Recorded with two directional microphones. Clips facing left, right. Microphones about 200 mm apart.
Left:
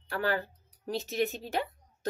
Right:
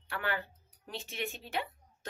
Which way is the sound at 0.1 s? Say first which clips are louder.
Left 6 dB; 40° left (ahead or behind).